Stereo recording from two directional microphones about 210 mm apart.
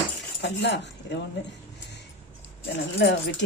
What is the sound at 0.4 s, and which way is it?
Speech, 55° left (ahead or behind).